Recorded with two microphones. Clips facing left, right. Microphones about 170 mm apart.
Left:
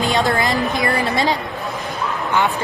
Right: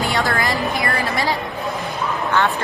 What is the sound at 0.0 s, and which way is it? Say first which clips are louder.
A woman's voice: left 3 dB; 20° left (ahead or behind).